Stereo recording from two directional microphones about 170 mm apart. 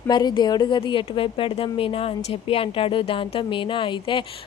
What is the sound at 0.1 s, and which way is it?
A woman's voice, 25° left (ahead or behind).